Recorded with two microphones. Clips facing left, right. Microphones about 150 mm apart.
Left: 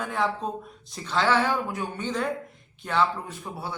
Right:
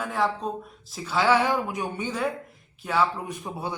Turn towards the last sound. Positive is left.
turn(degrees=-20)  # may be behind; listen again after turning